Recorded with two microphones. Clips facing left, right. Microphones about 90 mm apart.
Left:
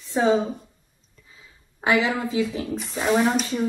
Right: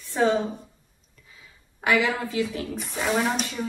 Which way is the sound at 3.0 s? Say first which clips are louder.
Left 4 dB; 10° left (ahead or behind).